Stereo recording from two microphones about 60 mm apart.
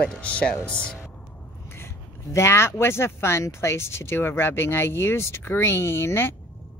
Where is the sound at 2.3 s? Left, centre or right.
Left.